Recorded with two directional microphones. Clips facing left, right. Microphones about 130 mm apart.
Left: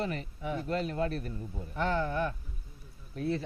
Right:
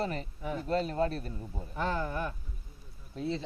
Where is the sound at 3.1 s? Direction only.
25° right (ahead or behind).